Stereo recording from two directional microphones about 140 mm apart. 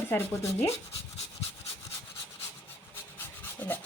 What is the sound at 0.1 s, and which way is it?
Rub, 15° left (ahead or behind).